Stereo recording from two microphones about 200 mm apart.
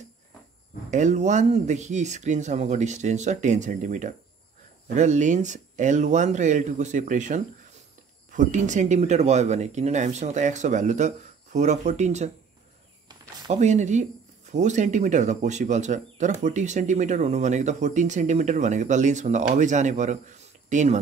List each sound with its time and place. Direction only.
0.8 s speech: 40° right (ahead or behind)
13.5 s speech: 35° right (ahead or behind)